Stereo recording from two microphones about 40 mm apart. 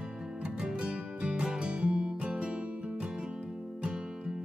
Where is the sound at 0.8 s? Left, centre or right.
Right.